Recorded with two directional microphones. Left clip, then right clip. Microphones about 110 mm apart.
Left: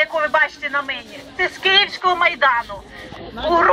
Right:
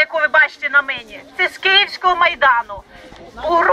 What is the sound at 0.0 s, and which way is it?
Speech, 30° right (ahead or behind).